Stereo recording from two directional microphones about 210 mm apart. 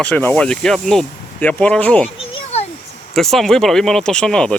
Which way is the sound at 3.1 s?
Centre (ahead or behind).